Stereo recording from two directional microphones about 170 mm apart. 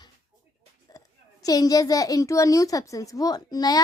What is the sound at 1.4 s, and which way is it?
A woman's voice, 20° left (ahead or behind).